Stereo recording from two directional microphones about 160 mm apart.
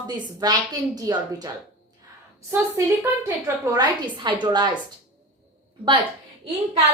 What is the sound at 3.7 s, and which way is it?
Speech, 30° right (ahead or behind).